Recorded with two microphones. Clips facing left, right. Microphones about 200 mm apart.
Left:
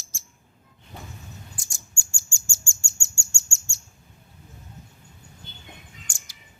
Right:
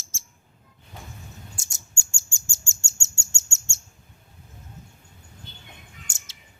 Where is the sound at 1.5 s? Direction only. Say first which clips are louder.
Even; 25° right (ahead or behind).